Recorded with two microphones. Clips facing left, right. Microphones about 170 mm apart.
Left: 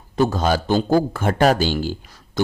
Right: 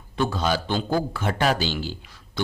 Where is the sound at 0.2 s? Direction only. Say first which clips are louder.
Left 5 dB; 45° left (ahead or behind).